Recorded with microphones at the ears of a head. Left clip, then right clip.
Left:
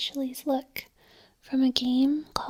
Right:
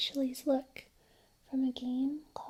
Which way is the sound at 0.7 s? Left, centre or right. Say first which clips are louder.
Left 11 dB; left.